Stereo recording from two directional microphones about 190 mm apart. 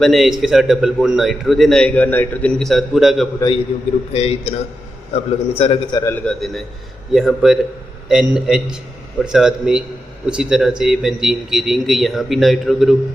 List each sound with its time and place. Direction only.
0.0 s a man's voice: centre (ahead or behind)
4.1 s a man's voice: 35° left (ahead or behind); by 13.0 s centre (ahead or behind)